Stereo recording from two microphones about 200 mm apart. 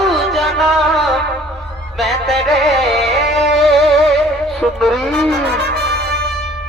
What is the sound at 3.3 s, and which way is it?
Music, centre (ahead or behind).